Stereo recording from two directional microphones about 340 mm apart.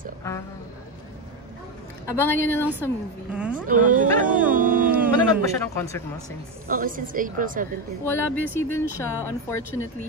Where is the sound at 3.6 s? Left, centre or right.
Right.